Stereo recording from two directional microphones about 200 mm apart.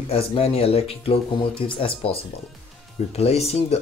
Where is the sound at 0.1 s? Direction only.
30° left (ahead or behind).